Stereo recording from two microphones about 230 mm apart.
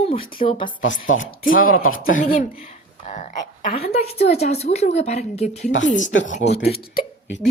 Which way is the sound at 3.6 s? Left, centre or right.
Left.